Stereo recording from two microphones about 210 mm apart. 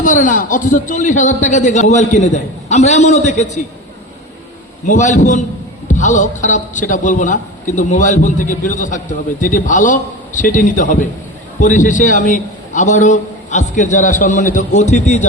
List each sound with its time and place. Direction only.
0.0 s a man's voice: 40° left (ahead or behind)
4.9 s a man's voice: 35° left (ahead or behind)